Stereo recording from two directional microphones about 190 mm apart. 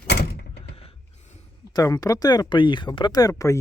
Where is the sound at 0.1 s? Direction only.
60° left (ahead or behind).